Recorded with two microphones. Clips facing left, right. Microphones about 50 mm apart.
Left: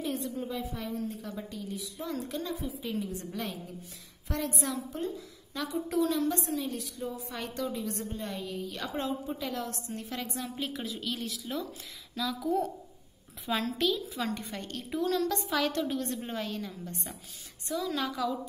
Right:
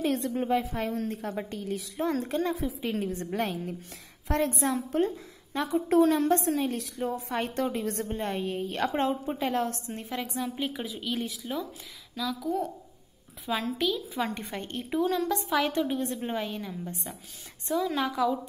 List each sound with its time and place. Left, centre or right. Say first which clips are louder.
0.0 s a sound: right 6 dB; right
0.3 s a woman's voice: right 8 dB; right
2.5 s a woman's voice: right 4 dB; right
2.8 s a woman's voice: right 4 dB; right
4.4 s a woman's voice: right 5 dB; right
10.6 s a woman's voice: right 2 dB; centre
12.2 s a woman's voice: even; centre
14.1 s a woman's voice: right 3 dB; right